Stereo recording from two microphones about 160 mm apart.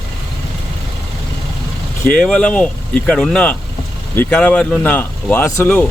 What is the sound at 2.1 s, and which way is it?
Speech, 5° left (ahead or behind).